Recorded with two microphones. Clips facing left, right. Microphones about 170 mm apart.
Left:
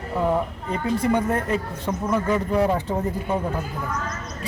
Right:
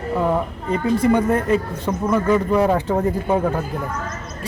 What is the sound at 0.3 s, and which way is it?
A woman's voice, 90° right.